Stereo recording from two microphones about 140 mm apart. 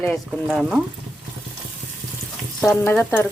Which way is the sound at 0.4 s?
Centre (ahead or behind).